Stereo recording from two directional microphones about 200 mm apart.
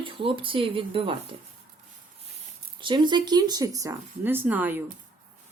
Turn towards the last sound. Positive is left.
turn(degrees=-10)  # may be behind; listen again after turning